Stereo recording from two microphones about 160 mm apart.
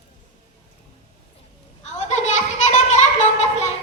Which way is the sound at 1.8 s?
45° left (ahead or behind).